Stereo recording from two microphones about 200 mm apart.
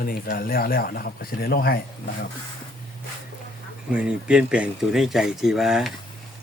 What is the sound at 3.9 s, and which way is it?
Speech, 5° right (ahead or behind).